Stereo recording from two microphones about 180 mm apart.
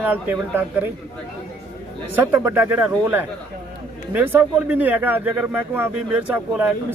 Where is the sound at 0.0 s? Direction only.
10° right (ahead or behind).